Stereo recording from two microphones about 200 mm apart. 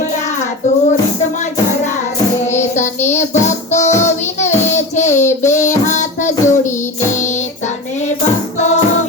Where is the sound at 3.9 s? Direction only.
35° left (ahead or behind).